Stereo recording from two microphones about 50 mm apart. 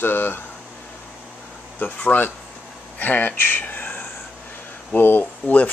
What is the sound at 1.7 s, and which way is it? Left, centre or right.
Speech, left.